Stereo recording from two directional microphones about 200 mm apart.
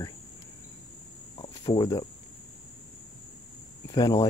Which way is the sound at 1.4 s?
25° left (ahead or behind).